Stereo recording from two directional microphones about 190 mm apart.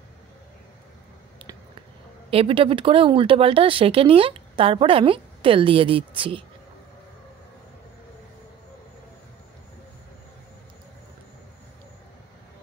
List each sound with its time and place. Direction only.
2.3 s speech: 30° right (ahead or behind)